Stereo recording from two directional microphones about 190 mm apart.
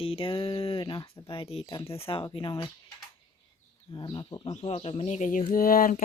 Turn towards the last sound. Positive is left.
turn(degrees=50)  # may be behind; listen again after turning